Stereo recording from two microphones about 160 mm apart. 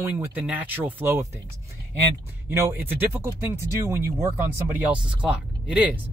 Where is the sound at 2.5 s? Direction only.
15° right (ahead or behind).